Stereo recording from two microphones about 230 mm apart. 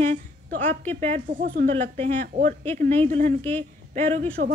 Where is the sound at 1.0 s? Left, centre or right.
Right.